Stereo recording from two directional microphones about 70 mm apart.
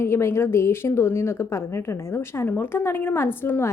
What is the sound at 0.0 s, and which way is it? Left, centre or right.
A woman's voice, left.